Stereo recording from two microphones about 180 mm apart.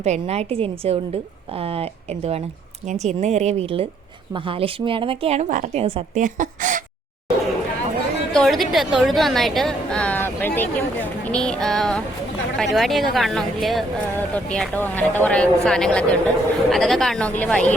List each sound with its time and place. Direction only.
0.0 s a woman's voice: 35° right (ahead or behind)
5.8 s a woman's voice: 30° right (ahead or behind)
6.2 s speech: 45° right (ahead or behind)
8.3 s speech: centre (ahead or behind)